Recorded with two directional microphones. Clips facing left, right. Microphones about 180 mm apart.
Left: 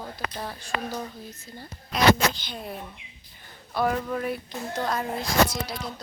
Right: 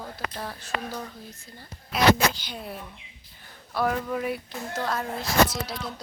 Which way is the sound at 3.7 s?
Centre (ahead or behind).